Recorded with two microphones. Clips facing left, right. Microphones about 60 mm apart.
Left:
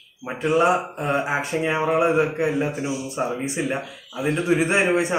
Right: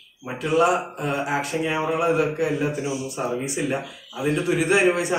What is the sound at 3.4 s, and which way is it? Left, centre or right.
Speech, left.